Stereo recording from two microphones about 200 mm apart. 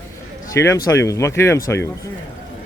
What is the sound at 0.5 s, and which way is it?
Speech, 15° left (ahead or behind).